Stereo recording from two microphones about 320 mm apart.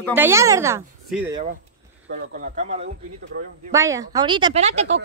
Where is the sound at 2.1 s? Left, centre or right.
Right.